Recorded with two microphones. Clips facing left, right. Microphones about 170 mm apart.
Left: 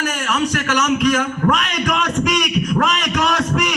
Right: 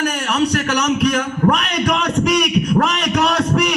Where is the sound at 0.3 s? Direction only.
35° right (ahead or behind).